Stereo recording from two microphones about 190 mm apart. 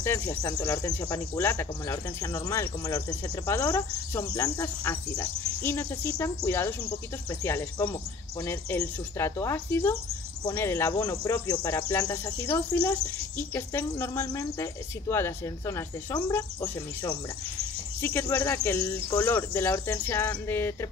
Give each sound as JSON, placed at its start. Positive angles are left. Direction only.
{"t": 0.0, "sound": "speech", "side_deg": 15}